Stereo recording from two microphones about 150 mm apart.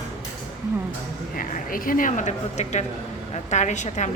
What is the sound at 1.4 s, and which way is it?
A woman's voice, 70° left (ahead or behind).